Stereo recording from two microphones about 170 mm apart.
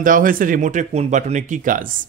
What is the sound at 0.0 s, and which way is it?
Speech, 55° right (ahead or behind).